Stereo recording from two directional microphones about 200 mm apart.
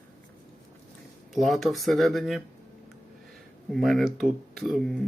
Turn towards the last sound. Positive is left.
turn(degrees=0)  # may be behind; listen again after turning